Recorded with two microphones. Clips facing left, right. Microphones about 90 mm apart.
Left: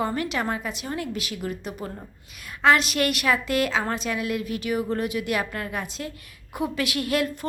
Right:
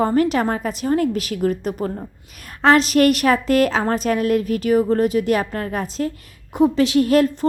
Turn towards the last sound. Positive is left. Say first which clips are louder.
# right 10 dB
turn(degrees=-35)  # may be behind; listen again after turning